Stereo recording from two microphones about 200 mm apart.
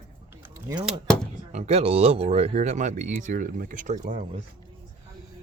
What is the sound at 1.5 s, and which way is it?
Speech, 30° right (ahead or behind).